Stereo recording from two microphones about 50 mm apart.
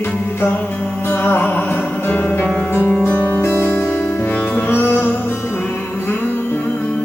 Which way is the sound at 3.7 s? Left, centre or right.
Left.